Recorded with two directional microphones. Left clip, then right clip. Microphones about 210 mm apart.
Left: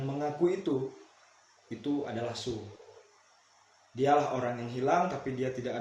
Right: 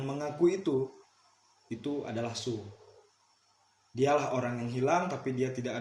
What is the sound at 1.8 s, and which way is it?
Speech, 45° right (ahead or behind).